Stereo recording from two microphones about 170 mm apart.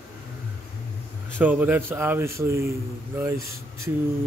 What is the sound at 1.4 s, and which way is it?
Speech, 10° right (ahead or behind).